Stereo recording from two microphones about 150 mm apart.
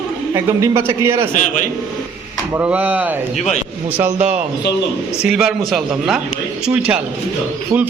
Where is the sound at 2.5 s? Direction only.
10° right (ahead or behind).